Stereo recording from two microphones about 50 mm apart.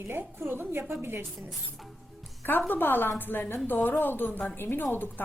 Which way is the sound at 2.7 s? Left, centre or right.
Left.